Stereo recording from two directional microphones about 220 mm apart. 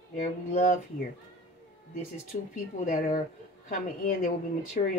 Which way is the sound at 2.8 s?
40° left (ahead or behind).